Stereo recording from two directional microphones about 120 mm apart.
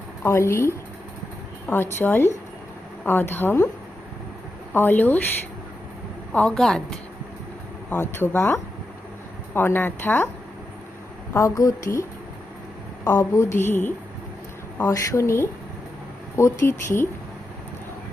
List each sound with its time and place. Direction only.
0.2 s speech: 20° left (ahead or behind)
4.7 s speech: 15° left (ahead or behind)
6.3 s a woman's voice: 5° left (ahead or behind)
8.1 s speech: 20° left (ahead or behind)
9.6 s speech: 15° left (ahead or behind)
11.3 s speech: 30° left (ahead or behind)
13.1 s speech: 25° left (ahead or behind)